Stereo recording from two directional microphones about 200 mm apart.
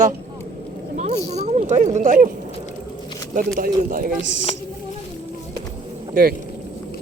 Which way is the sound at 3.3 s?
45° right (ahead or behind).